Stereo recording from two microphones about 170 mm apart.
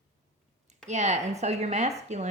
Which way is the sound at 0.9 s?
40° right (ahead or behind).